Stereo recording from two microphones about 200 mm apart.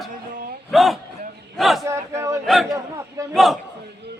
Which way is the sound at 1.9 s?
15° right (ahead or behind).